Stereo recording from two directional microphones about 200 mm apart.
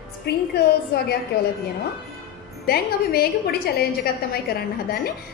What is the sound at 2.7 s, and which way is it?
A woman's voice, 50° left (ahead or behind).